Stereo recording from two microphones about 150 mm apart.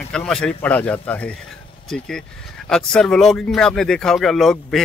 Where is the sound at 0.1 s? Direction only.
5° left (ahead or behind).